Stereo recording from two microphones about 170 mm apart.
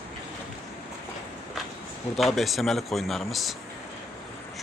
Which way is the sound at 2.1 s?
Centre (ahead or behind).